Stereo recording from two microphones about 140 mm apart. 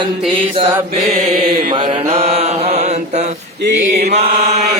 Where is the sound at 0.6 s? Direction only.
40° right (ahead or behind).